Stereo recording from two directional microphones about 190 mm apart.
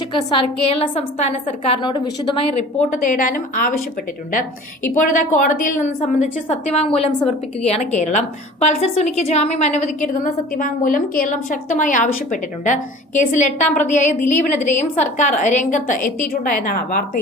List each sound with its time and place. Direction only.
0.1 s a woman's voice: 25° left (ahead or behind)
2.9 s a woman's voice: 45° left (ahead or behind)
5.1 s a woman's voice: 45° left (ahead or behind)